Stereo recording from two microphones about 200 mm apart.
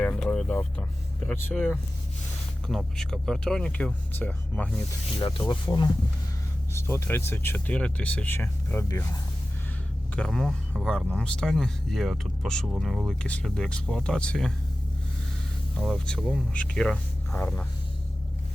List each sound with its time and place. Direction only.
0.0 s a sound: 5° left (ahead or behind)
1.3 s speech: 10° left (ahead or behind)
5.4 s speech: 20° left (ahead or behind)
10.2 s speech: 5° left (ahead or behind)
15.8 s speech: centre (ahead or behind)